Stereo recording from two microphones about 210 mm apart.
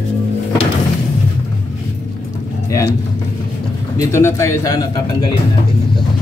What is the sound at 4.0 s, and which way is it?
A man's voice, 15° left (ahead or behind).